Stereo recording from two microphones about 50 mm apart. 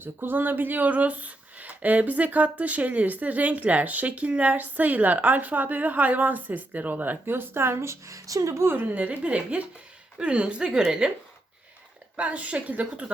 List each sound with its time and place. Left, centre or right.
0.0 s speech: right
8.6 s a woman's voice: right; by 11.1 s centre
12.1 s a woman's voice: right